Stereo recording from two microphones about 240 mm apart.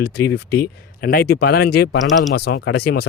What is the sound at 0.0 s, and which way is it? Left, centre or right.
Speech, left.